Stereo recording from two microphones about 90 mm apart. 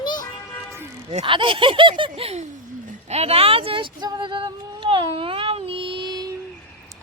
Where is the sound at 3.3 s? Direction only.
90° right; by 4.1 s 70° right (ahead or behind).